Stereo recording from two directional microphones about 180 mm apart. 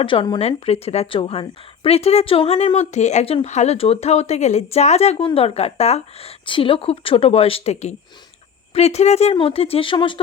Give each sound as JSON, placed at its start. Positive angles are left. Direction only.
{"t": 0.0, "sound": "a woman's voice", "side_deg": 30}